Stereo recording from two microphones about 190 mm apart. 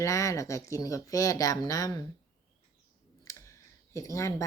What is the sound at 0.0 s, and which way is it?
Speech, 15° left (ahead or behind).